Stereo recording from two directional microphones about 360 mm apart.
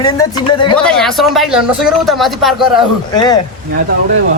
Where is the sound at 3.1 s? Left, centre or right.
Centre.